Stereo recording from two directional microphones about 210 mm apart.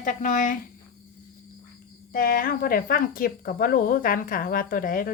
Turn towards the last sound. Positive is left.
turn(degrees=40)  # may be behind; listen again after turning